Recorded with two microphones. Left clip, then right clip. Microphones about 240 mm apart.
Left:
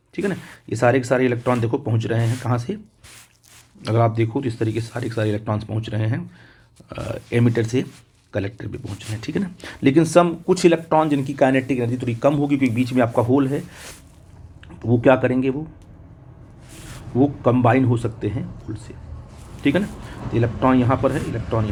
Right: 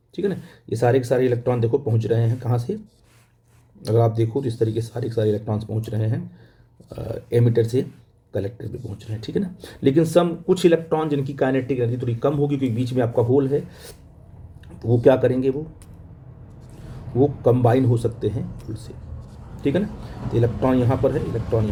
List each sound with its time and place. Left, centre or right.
0.2 s speech: centre
3.8 s speech: centre
15.0 s speech: centre
17.4 s speech: centre
20.3 s speech: centre